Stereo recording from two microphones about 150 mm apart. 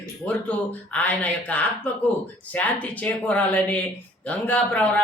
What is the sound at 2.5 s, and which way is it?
Speech, 10° left (ahead or behind).